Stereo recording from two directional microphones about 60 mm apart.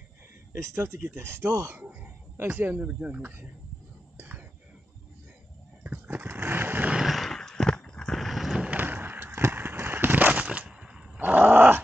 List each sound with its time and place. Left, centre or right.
0.5 s speech: right
1.8 s a sound: right
2.5 s speech: right
4.2 s whispering: right
5.9 s vehicle: right
7.1 s horse: centre
8.2 s vehicle: centre
8.7 s a sound: right; by 11.0 s centre
11.1 s dog: right